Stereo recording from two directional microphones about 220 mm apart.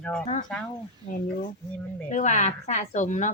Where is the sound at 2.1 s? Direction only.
35° left (ahead or behind).